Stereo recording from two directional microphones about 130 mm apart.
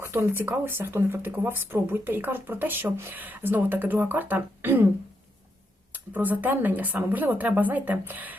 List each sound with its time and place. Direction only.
0.0 s speech: 20° right (ahead or behind)
5.9 s speech: 15° right (ahead or behind)